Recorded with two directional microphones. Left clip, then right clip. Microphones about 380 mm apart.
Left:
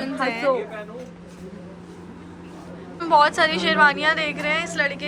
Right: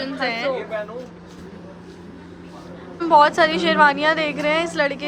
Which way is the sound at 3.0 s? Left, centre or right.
Centre.